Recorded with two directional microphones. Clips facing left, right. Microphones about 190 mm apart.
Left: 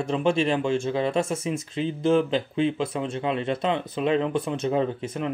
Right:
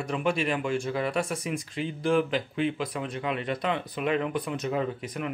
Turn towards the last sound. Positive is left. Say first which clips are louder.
# left 5 dB
turn(degrees=30)  # may be behind; listen again after turning